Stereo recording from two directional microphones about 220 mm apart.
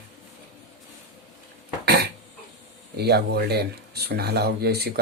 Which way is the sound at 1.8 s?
45° right (ahead or behind).